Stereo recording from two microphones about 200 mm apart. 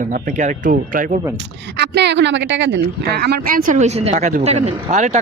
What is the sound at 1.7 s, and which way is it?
Speech, 60° right (ahead or behind).